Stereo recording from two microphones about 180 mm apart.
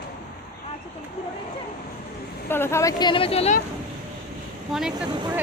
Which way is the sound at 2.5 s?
15° left (ahead or behind).